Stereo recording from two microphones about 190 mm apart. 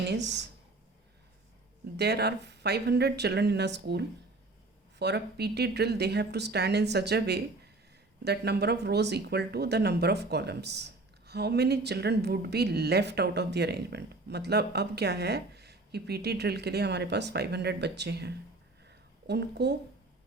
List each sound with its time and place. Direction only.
0.1 s speech: 65° right (ahead or behind)
2.0 s speech: 60° right (ahead or behind)
18.9 s a sound: 60° right (ahead or behind)